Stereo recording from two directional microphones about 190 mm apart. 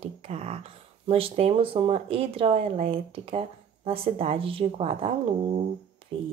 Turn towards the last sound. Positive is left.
turn(degrees=-30)  # may be behind; listen again after turning